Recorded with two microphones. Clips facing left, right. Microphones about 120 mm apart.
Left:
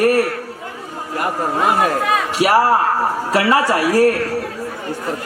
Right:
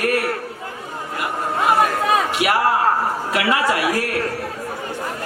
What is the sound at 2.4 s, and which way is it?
A man's voice, 35° left (ahead or behind).